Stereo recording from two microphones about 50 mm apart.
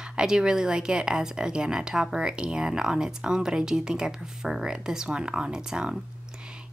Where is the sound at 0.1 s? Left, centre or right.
Centre.